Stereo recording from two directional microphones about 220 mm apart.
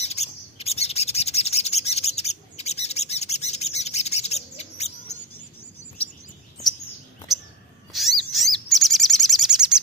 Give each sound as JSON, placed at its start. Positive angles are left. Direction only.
{"t": 0.0, "sound": "bird", "side_deg": 30}
{"t": 7.9, "sound": "owl", "side_deg": 0}
{"t": 8.6, "sound": "chirp", "side_deg": 0}